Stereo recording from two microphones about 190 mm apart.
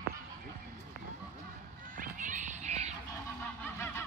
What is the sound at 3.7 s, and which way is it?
Goose, 15° left (ahead or behind).